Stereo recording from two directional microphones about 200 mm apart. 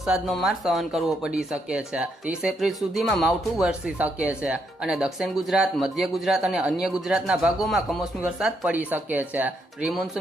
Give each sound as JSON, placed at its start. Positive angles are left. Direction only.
{"t": 0.0, "sound": "speech", "side_deg": 0}